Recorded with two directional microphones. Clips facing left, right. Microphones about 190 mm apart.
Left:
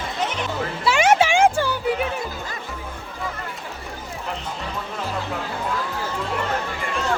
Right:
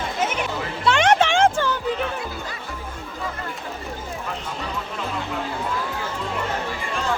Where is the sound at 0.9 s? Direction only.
5° left (ahead or behind).